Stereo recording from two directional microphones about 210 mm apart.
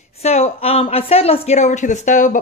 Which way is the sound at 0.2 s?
30° left (ahead or behind).